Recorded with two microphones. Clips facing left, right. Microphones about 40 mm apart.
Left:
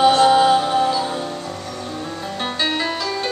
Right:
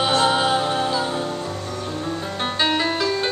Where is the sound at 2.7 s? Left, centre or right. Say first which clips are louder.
Right 1 dB; centre.